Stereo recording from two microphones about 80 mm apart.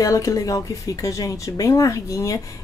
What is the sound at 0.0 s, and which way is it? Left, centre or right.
Speech, left.